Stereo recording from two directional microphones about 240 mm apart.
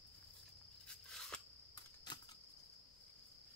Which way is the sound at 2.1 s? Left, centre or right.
Centre.